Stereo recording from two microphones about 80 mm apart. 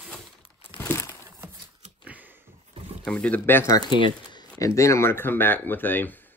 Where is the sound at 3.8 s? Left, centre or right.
Left.